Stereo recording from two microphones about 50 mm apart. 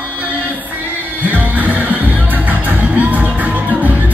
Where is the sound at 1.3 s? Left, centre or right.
Right.